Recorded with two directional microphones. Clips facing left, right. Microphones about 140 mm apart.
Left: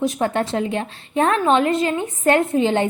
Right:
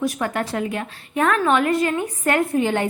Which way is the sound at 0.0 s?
25° left (ahead or behind).